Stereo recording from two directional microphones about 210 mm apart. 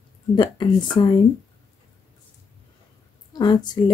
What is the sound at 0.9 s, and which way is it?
Speech, 20° left (ahead or behind).